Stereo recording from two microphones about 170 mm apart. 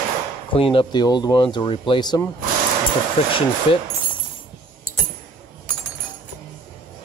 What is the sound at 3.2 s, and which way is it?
Speech, 35° left (ahead or behind).